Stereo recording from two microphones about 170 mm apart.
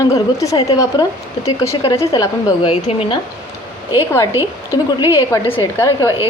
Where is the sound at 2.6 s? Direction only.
35° left (ahead or behind).